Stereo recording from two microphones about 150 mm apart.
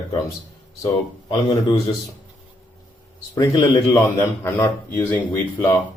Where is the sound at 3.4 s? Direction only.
30° left (ahead or behind).